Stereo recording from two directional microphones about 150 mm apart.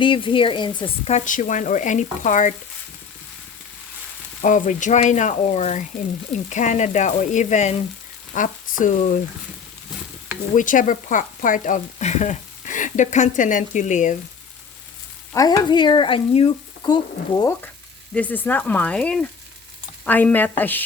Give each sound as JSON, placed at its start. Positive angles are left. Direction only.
{"t": 0.0, "sound": "speech", "side_deg": 35}
{"t": 1.0, "sound": "speech", "side_deg": 55}
{"t": 4.4, "sound": "speech", "side_deg": 60}
{"t": 10.5, "sound": "speech", "side_deg": 60}
{"t": 15.3, "sound": "speech", "side_deg": 25}
{"t": 16.8, "sound": "speech", "side_deg": 25}
{"t": 18.1, "sound": "speech", "side_deg": 10}